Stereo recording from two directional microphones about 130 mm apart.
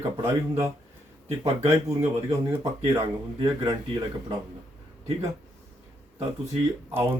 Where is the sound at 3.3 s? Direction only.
30° right (ahead or behind).